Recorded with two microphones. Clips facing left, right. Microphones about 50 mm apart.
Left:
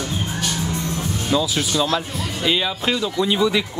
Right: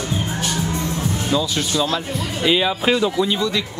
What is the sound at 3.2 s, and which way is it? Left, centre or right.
Speech, centre.